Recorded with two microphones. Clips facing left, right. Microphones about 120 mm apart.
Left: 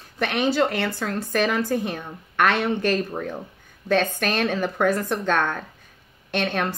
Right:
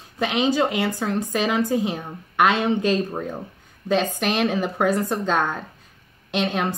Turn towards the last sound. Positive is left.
turn(degrees=-10)  # may be behind; listen again after turning